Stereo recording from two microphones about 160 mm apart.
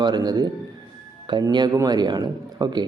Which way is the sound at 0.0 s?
25° right (ahead or behind).